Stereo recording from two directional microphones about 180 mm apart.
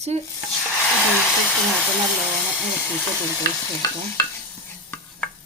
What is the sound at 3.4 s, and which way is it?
Stir, 20° left (ahead or behind).